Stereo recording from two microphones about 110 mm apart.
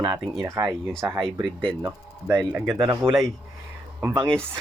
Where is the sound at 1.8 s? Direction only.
20° right (ahead or behind).